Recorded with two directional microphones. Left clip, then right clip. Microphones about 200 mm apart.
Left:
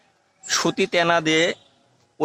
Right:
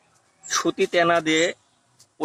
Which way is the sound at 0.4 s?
30° left (ahead or behind).